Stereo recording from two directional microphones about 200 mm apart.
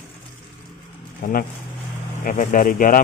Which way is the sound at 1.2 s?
45° left (ahead or behind).